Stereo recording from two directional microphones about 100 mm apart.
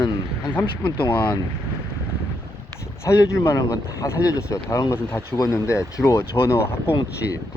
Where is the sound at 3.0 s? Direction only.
30° left (ahead or behind).